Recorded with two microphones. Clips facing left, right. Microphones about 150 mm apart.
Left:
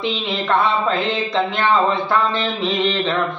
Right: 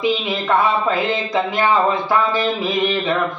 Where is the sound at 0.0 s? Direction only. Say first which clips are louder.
Right 3 dB; 10° right (ahead or behind).